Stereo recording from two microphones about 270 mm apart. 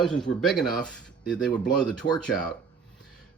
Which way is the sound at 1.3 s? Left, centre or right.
Centre.